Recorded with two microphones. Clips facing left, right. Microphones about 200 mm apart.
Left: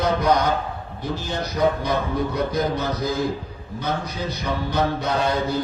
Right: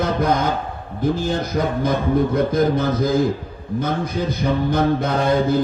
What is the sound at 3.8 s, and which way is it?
Mantra, 50° right (ahead or behind).